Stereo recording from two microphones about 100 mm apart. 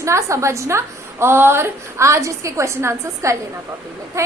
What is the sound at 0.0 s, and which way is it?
A woman's voice, 30° right (ahead or behind).